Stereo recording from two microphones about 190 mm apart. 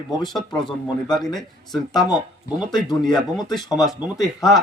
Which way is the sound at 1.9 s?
20° left (ahead or behind).